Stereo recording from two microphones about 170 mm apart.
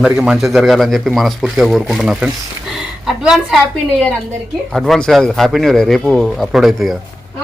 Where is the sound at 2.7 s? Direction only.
Centre (ahead or behind).